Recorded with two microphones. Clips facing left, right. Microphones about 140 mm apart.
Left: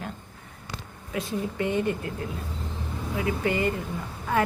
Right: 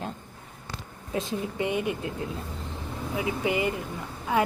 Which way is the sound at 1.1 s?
20° right (ahead or behind).